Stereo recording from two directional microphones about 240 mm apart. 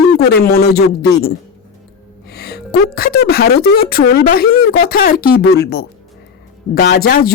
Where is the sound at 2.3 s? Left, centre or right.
Left.